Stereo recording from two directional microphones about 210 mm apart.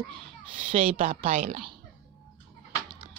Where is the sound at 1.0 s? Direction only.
40° right (ahead or behind).